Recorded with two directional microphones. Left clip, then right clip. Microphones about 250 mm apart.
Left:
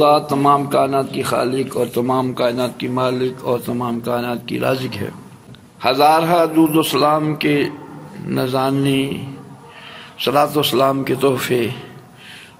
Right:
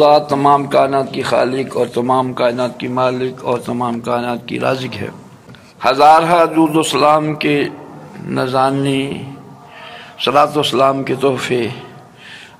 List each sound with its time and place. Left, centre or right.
0.0 s a man's voice: left